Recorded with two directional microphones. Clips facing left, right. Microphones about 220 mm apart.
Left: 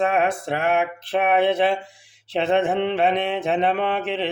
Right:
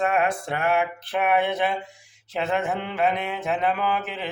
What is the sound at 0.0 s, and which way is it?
Mantra, 25° left (ahead or behind).